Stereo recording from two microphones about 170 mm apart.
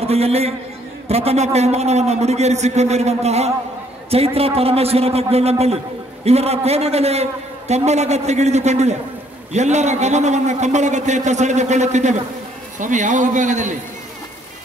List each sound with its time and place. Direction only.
0.0 s a man's voice: 35° right (ahead or behind)